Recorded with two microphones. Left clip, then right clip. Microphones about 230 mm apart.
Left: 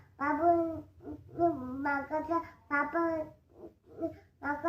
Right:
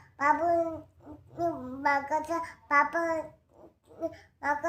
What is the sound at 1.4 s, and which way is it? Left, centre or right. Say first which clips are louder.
Child singing: right 1 dB; right.